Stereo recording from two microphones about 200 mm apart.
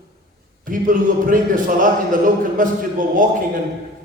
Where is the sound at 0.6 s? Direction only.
45° right (ahead or behind).